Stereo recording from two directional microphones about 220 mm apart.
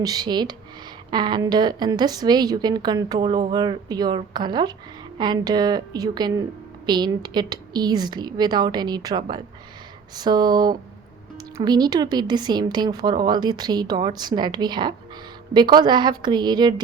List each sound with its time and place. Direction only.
0.0 s a woman's voice: 20° right (ahead or behind)